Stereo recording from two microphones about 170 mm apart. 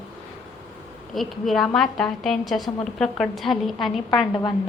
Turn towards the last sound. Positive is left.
turn(degrees=25)  # may be behind; listen again after turning